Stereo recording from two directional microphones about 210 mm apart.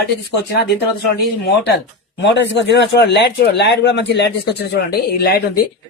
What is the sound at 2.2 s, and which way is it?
Speech, 55° left (ahead or behind).